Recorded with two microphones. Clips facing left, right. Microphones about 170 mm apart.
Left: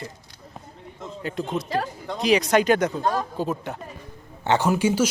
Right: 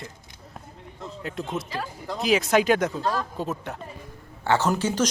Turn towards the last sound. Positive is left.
turn(degrees=10)  # may be behind; listen again after turning